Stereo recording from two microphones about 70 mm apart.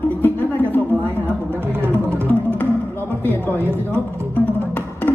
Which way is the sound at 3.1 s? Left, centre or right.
Right.